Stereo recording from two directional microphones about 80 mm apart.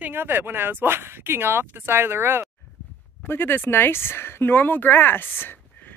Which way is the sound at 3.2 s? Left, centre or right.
Left.